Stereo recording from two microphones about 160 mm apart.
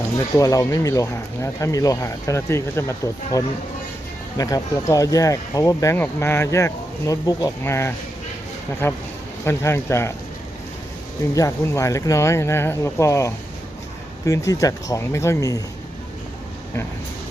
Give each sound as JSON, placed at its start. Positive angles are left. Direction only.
{"t": 0.3, "sound": "speech", "side_deg": 20}
{"t": 11.3, "sound": "speech", "side_deg": 20}